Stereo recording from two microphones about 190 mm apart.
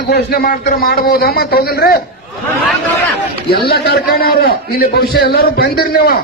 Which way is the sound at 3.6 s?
60° left (ahead or behind).